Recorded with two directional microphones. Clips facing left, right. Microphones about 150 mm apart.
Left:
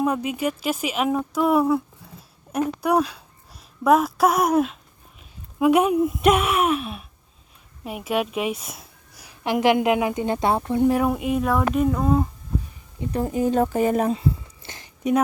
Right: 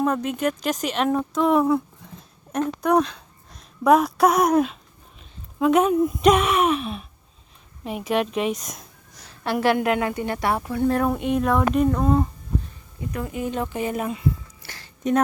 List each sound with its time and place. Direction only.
0.0 s a woman's voice: 10° left (ahead or behind)
13.0 s speech: 35° left (ahead or behind)
15.0 s speech: 10° left (ahead or behind)